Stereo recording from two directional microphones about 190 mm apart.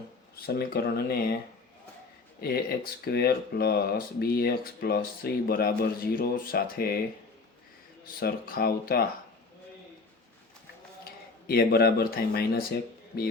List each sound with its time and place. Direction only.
0.4 s speech: 55° left (ahead or behind)
2.4 s speech: 55° left (ahead or behind)
8.0 s speech: 50° left (ahead or behind)
11.4 s speech: 55° left (ahead or behind)